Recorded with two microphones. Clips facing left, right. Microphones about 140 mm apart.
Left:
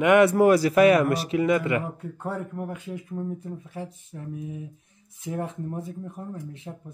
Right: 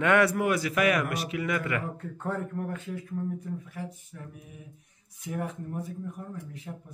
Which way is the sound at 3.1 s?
25° left (ahead or behind).